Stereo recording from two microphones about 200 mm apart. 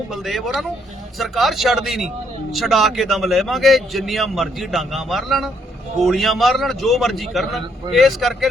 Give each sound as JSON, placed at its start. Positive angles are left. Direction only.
{"t": 0.1, "sound": "a man's voice", "side_deg": 0}